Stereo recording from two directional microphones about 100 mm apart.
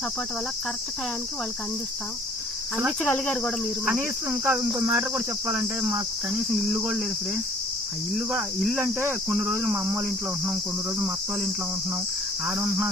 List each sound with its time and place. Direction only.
3.0 s speech: 15° left (ahead or behind)
4.3 s cricket: 20° right (ahead or behind)
5.1 s cricket: 5° right (ahead or behind)
8.1 s cricket: 5° right (ahead or behind)
8.8 s cricket: 25° right (ahead or behind)
12.5 s cricket: 10° right (ahead or behind)